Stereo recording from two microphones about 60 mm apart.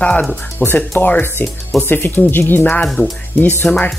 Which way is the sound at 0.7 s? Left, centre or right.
Left.